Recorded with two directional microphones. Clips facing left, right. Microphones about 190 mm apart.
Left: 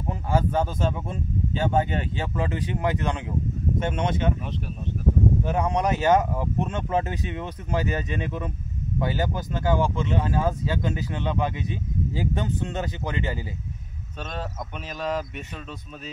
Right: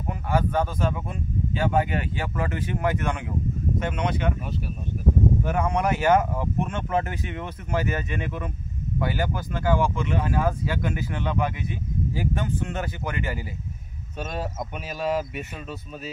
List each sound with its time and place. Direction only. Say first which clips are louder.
0.6 s speech: even; 25° left (ahead or behind)
5.4 s speech: even; 20° left (ahead or behind)
15.0 s speech: right 2 dB; 5° right (ahead or behind)